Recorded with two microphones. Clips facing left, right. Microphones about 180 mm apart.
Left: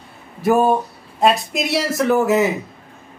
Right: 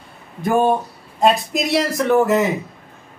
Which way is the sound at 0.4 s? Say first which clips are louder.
Left 1 dB; 5° left (ahead or behind).